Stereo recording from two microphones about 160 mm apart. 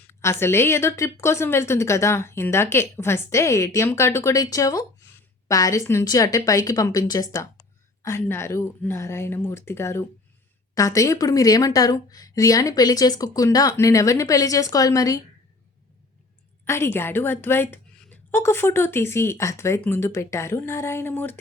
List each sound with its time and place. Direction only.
0.0 s a woman's voice: 15° left (ahead or behind)
16.6 s a woman's voice: 15° left (ahead or behind)